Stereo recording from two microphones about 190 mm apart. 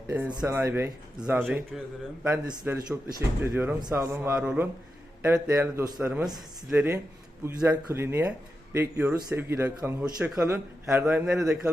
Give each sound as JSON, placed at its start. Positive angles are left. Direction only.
{"t": 0.3, "sound": "a man's voice", "side_deg": -20}